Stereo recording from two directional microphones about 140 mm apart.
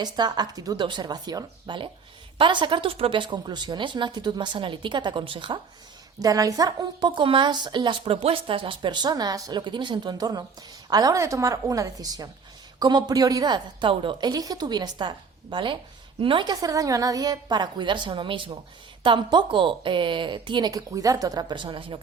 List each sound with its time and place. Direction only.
0.0 s speech: 30° right (ahead or behind)
6.1 s a woman's voice: 25° right (ahead or behind)